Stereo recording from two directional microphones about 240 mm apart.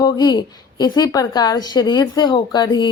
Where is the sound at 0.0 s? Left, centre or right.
Centre.